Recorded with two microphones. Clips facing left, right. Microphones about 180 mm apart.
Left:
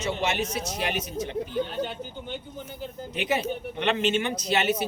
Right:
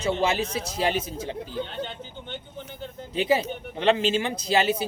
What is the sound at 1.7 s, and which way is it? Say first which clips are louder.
Speech: left 3 dB; 10° left (ahead or behind).